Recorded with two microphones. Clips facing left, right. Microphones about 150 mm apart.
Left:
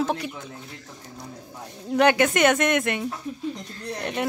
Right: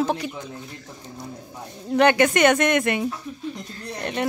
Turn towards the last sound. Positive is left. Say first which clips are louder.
# right 1 dB
turn(degrees=5)  # may be behind; listen again after turning